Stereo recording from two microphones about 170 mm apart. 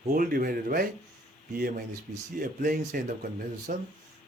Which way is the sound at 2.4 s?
55° right (ahead or behind).